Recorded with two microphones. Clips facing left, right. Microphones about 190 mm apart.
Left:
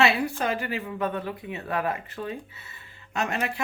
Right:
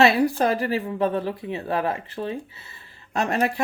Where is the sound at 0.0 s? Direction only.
40° right (ahead or behind).